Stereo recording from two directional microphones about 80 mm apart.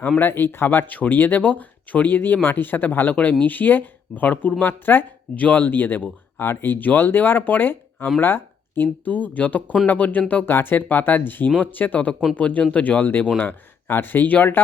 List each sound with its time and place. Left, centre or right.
0.2 s speech: left